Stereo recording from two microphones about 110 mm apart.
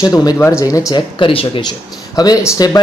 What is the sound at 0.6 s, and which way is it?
Speech, 30° left (ahead or behind).